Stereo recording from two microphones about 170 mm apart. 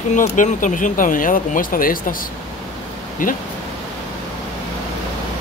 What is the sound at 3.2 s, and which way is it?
Speech, 55° left (ahead or behind).